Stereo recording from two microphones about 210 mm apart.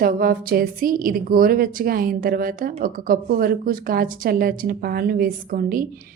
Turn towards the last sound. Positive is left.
turn(degrees=-45)  # may be behind; listen again after turning